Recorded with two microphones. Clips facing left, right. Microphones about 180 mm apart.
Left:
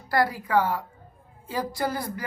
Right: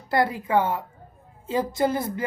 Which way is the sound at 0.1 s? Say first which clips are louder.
Right 1 dB; 25° right (ahead or behind).